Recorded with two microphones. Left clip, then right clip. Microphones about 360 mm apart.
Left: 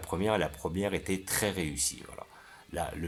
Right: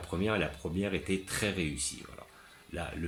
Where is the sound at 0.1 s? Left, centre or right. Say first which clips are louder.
Left 3 dB; centre.